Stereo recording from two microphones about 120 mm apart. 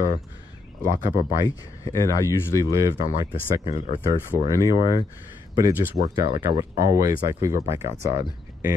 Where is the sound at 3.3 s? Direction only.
50° left (ahead or behind).